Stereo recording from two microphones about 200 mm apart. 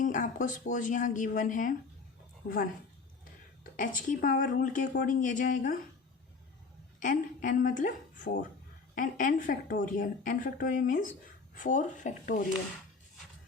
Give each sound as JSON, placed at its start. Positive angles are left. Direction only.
{"t": 0.0, "sound": "speech", "side_deg": 40}
{"t": 3.6, "sound": "speech", "side_deg": 45}
{"t": 7.0, "sound": "speech", "side_deg": 40}